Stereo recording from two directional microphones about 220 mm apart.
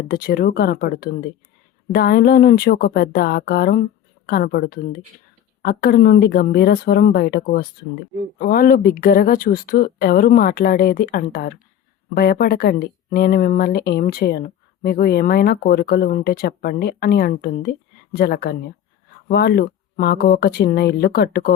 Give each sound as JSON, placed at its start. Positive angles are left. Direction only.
{"t": 0.1, "sound": "a woman's voice", "side_deg": 45}